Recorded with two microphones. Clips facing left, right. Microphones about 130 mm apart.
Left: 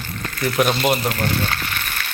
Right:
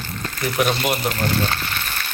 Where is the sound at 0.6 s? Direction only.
5° left (ahead or behind).